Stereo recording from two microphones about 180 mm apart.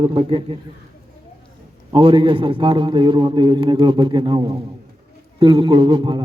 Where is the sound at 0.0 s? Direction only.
30° right (ahead or behind).